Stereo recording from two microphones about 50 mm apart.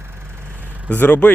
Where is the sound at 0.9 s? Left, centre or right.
Left.